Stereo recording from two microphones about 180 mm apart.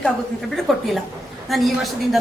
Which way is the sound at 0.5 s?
Centre (ahead or behind).